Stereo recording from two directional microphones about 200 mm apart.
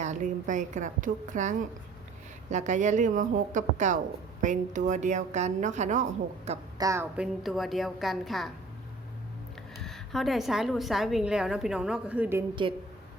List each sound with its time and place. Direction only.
0.0 s a woman's voice: 40° right (ahead or behind)
6.7 s a woman's voice: 15° right (ahead or behind)
7.4 s a woman's voice: centre (ahead or behind)
9.8 s a woman's voice: centre (ahead or behind)